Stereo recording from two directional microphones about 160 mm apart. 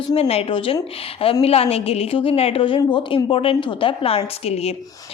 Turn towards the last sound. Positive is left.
turn(degrees=40)  # may be behind; listen again after turning